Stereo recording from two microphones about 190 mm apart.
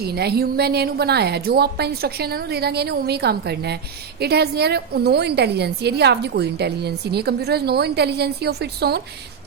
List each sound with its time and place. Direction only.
0.0 s a woman's voice: 55° right (ahead or behind)